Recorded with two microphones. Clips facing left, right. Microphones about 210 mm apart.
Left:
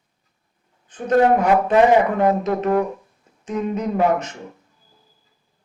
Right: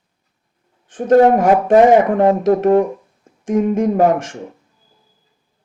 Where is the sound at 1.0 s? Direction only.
50° right (ahead or behind).